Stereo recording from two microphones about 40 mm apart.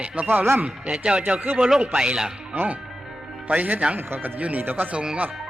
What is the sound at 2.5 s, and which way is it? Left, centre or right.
Speech, right.